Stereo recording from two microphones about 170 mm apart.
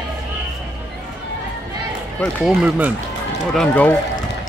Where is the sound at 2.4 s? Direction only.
10° right (ahead or behind).